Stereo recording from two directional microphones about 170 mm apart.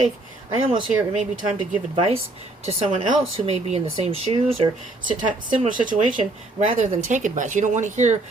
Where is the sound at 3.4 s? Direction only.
40° right (ahead or behind).